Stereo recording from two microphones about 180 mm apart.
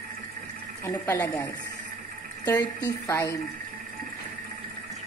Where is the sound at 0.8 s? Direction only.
15° left (ahead or behind).